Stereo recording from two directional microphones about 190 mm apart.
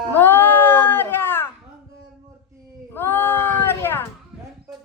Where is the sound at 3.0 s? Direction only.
10° left (ahead or behind).